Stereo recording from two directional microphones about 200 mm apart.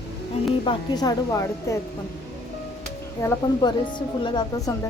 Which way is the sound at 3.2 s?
20° left (ahead or behind).